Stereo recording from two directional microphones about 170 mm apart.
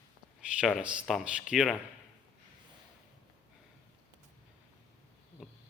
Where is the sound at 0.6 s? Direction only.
5° right (ahead or behind).